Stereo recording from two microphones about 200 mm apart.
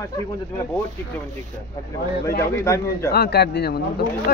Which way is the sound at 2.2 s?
15° left (ahead or behind).